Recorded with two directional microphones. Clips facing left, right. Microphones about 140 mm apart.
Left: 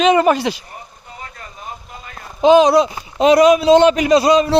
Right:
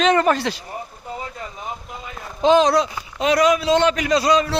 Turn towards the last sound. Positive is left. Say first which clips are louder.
# left 5 dB
turn(degrees=20)  # may be behind; listen again after turning